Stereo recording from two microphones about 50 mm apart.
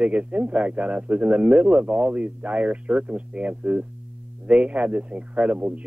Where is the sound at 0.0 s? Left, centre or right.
Right.